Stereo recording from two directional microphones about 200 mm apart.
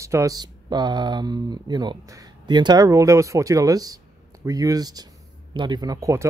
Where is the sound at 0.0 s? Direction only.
15° right (ahead or behind).